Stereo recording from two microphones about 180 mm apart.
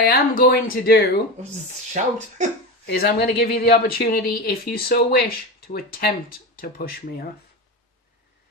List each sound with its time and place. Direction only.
0.0 s speech: 60° left (ahead or behind)
2.0 s speech: 40° right (ahead or behind)
2.8 s speech: 60° left (ahead or behind)